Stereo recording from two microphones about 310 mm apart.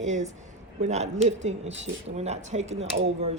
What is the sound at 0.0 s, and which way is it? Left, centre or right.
Speech, right.